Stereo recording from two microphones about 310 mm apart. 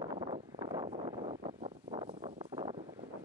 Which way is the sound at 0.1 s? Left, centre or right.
Centre.